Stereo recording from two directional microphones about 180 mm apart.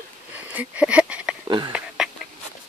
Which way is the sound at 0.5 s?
5° right (ahead or behind).